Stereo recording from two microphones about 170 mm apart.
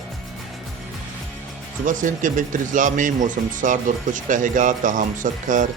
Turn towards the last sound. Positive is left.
turn(degrees=-50)  # may be behind; listen again after turning